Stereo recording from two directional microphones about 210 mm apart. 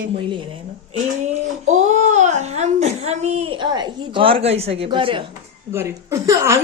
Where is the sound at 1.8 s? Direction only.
35° right (ahead or behind).